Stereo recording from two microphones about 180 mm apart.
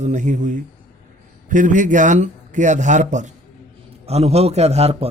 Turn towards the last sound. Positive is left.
turn(degrees=-35)  # may be behind; listen again after turning